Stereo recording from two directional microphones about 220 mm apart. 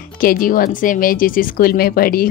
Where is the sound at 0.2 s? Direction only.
40° left (ahead or behind).